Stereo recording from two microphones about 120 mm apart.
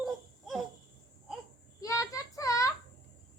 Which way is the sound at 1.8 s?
25° left (ahead or behind).